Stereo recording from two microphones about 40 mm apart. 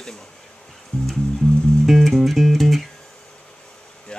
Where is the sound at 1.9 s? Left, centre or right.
Centre.